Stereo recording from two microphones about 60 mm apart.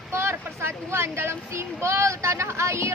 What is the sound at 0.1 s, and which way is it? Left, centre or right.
Speech, right.